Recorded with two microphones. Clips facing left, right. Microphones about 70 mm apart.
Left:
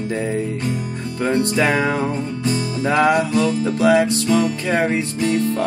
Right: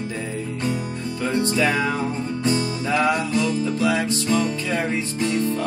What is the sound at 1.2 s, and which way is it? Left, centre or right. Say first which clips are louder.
Music: left 4 dB; left.